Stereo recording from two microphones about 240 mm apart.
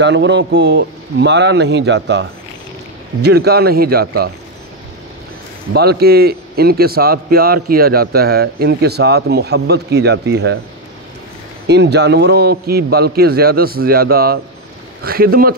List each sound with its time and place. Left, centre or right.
0.0 s a man's voice: right
5.7 s a man's voice: right
11.6 s a man's voice: right